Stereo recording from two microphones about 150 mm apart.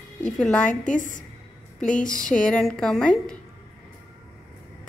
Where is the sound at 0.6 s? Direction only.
60° left (ahead or behind).